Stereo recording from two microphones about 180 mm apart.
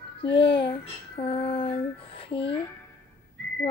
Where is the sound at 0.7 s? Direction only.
30° left (ahead or behind).